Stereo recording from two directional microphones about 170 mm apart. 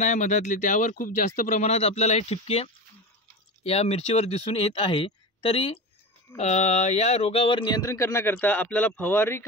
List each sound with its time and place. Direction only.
0.0 s speech: 45° left (ahead or behind); by 9.4 s 10° left (ahead or behind)